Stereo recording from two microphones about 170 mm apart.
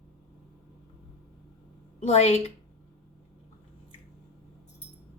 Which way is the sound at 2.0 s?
40° left (ahead or behind).